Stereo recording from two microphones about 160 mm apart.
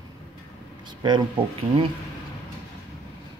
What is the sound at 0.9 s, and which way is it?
Speech, 30° right (ahead or behind).